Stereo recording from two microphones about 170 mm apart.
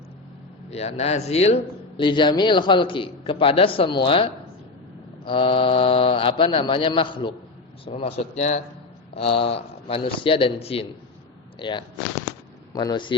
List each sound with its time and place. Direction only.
0.7 s speech: 40° left (ahead or behind)
2.0 s a man's voice: 25° left (ahead or behind); by 8.6 s 45° left (ahead or behind)
9.1 s a man's voice: 35° left (ahead or behind)